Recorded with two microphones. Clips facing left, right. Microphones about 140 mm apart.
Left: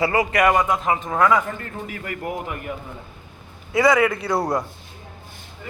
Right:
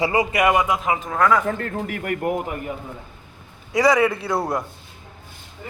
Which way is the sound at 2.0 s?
50° right (ahead or behind).